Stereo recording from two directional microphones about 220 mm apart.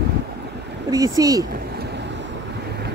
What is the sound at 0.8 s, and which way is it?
Speech, 15° right (ahead or behind).